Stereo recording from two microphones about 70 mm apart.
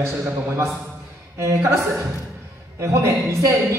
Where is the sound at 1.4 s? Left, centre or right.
Right.